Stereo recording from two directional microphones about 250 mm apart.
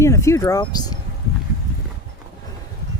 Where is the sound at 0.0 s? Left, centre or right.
Centre.